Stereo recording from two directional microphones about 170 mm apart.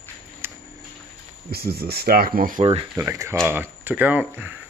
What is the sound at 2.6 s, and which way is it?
Speech, 30° right (ahead or behind).